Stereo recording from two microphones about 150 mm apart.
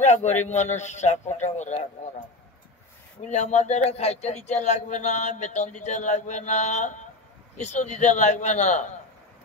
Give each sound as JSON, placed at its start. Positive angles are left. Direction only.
{"t": 0.0, "sound": "speech", "side_deg": 50}
{"t": 3.3, "sound": "speech", "side_deg": 50}